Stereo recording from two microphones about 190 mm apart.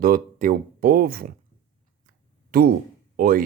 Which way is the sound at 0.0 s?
50° right (ahead or behind).